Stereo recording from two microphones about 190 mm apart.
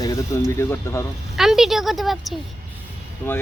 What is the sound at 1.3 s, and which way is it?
Speech, centre (ahead or behind).